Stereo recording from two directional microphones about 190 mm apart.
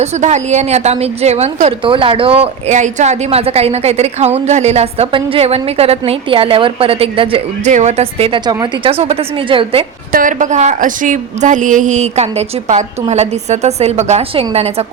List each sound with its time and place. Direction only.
0.0 s a woman's voice: 35° right (ahead or behind)
10.1 s a woman's voice: 45° right (ahead or behind)